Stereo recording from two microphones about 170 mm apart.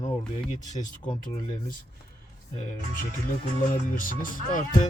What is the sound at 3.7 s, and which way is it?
Speech, 55° left (ahead or behind).